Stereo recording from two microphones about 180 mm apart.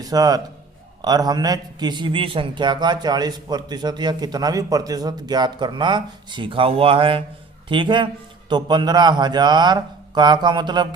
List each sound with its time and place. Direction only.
0.0 s a man's voice: 20° right (ahead or behind)